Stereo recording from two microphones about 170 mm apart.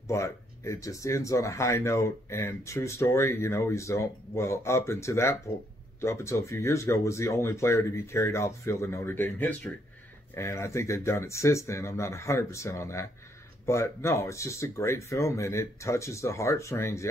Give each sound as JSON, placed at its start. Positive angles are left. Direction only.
{"t": 0.1, "sound": "speech", "side_deg": 15}